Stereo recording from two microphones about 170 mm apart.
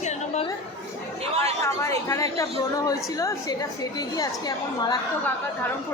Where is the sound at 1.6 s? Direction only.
15° left (ahead or behind).